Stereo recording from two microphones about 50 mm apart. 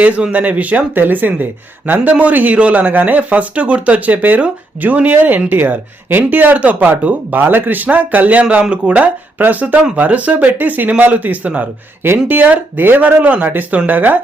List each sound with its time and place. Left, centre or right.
0.3 s speech: right
7.3 s speech: right
9.4 s speech: right